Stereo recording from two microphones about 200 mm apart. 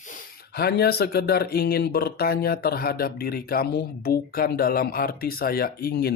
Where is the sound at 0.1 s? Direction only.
50° left (ahead or behind).